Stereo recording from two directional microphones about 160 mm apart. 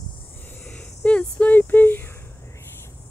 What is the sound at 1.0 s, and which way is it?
Speech, 10° left (ahead or behind).